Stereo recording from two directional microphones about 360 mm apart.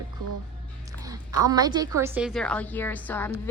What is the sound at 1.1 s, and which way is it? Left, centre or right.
A woman's voice, centre.